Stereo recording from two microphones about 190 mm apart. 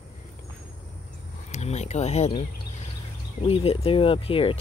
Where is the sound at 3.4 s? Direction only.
30° left (ahead or behind).